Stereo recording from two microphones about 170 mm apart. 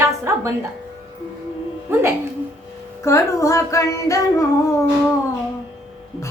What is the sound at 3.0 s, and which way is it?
Music, 20° left (ahead or behind).